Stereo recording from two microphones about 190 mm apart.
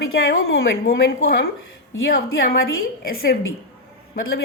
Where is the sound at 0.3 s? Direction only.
90° left.